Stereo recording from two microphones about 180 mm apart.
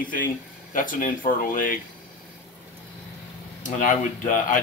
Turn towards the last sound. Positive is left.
turn(degrees=45)  # may be behind; listen again after turning